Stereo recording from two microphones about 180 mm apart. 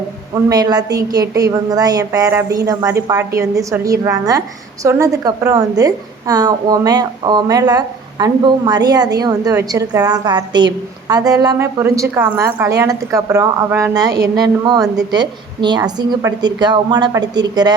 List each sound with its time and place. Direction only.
0.4 s a woman's voice: 20° right (ahead or behind)